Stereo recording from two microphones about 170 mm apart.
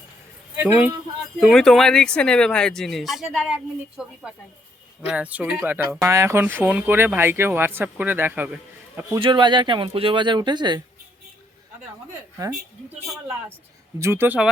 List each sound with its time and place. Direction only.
0.5 s speech: 10° right (ahead or behind)
1.4 s speech: centre (ahead or behind)
9.1 s speech: 30° right (ahead or behind)
14.0 s speech: 15° right (ahead or behind)